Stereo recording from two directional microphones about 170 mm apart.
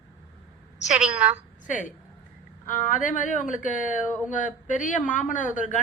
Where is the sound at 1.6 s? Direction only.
50° left (ahead or behind).